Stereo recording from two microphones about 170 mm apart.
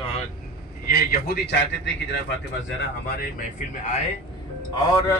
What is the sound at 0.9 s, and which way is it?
Speech, 65° left (ahead or behind).